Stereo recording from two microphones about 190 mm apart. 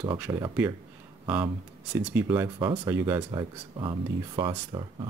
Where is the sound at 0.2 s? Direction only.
10° right (ahead or behind).